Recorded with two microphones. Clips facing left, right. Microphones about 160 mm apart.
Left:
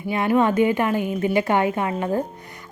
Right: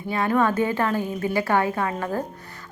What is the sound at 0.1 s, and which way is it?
A woman's voice, 20° left (ahead or behind).